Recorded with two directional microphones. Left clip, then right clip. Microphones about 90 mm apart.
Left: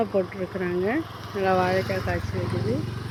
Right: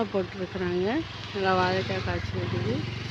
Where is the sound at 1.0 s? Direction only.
50° left (ahead or behind).